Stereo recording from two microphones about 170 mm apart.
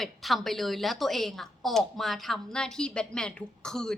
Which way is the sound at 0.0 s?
Centre (ahead or behind).